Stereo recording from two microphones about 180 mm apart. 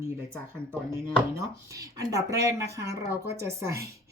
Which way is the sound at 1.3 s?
20° right (ahead or behind).